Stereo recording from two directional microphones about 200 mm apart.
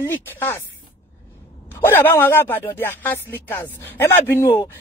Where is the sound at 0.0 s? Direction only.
10° left (ahead or behind).